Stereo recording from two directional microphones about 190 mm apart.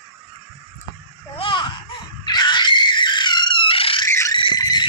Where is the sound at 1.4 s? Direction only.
25° left (ahead or behind).